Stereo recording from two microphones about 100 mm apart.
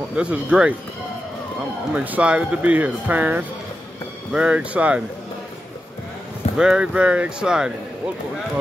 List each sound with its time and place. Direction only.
0.1 s speech: 10° right (ahead or behind)
2.0 s speech: 15° right (ahead or behind)
6.5 s speech: 10° right (ahead or behind)